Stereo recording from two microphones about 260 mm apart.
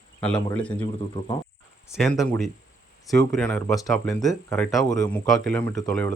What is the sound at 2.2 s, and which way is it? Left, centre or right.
Speech, centre.